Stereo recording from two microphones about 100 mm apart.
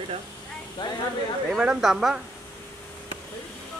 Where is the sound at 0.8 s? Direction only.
45° left (ahead or behind).